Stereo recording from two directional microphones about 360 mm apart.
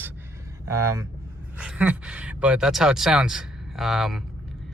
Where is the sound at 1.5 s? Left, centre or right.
Centre.